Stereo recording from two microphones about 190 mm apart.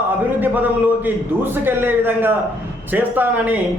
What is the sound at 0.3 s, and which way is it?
A man's voice, 10° right (ahead or behind).